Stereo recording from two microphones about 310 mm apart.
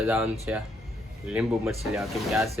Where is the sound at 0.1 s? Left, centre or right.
Centre.